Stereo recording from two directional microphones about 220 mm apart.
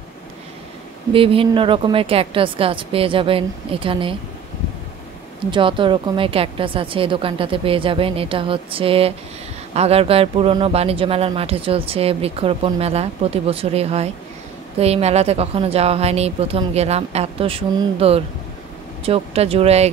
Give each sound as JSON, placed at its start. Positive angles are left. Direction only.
{"t": 1.1, "sound": "a man's voice", "side_deg": -25}
{"t": 5.4, "sound": "a man's voice", "side_deg": -20}